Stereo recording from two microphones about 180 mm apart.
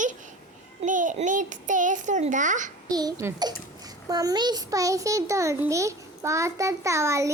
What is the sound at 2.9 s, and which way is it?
A child's voice, 20° right (ahead or behind).